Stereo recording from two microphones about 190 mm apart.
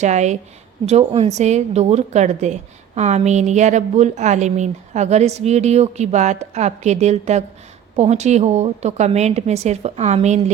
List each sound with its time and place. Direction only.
0.0 s a woman's voice: 40° right (ahead or behind)